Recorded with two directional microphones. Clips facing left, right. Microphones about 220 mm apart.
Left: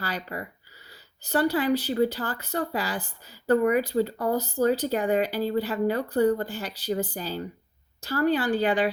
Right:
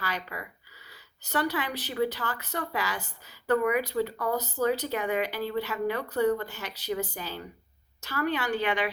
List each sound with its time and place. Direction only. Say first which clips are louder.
0.0 s speech: left 3 dB; 35° left (ahead or behind)